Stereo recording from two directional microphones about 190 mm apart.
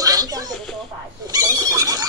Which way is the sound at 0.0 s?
20° right (ahead or behind).